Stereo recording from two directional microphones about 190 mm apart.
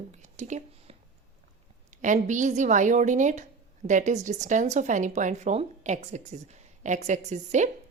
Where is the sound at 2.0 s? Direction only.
40° right (ahead or behind).